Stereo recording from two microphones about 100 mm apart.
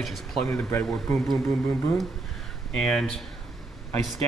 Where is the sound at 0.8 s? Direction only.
10° left (ahead or behind).